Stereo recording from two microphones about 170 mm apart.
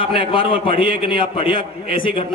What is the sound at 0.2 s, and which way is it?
A man's voice, 30° left (ahead or behind).